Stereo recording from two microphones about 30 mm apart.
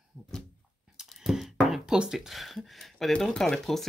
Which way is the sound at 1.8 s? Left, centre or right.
Right.